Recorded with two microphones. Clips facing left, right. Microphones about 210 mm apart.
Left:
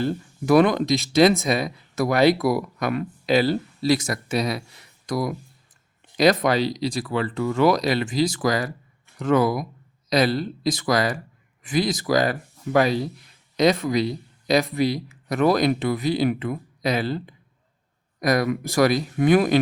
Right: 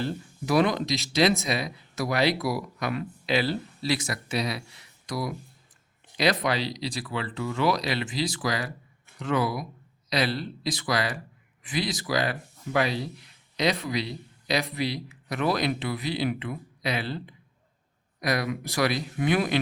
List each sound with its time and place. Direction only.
0.0 s speech: 50° left (ahead or behind)